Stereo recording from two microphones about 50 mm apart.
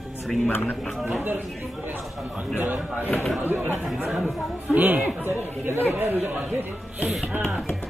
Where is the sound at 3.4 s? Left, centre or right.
Right.